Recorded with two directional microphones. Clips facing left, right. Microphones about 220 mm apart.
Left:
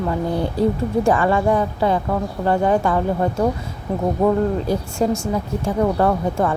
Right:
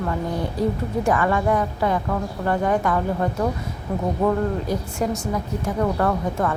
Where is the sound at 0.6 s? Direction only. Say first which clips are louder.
Left 5 dB; 30° left (ahead or behind).